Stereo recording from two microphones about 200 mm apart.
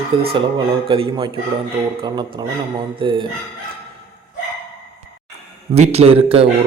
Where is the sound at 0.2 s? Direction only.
30° right (ahead or behind).